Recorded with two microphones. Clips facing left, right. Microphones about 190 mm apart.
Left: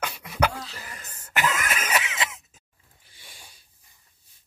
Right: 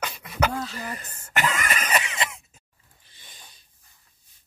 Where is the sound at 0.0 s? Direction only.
10° left (ahead or behind).